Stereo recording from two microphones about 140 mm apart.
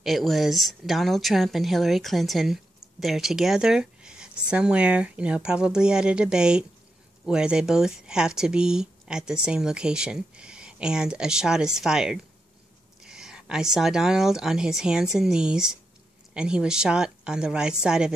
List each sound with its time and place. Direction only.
0.0 s speech: centre (ahead or behind)